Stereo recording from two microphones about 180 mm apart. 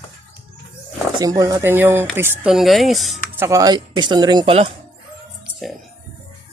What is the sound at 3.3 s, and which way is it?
Speech, 15° right (ahead or behind).